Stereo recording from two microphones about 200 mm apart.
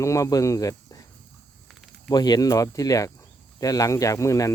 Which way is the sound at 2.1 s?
20° left (ahead or behind).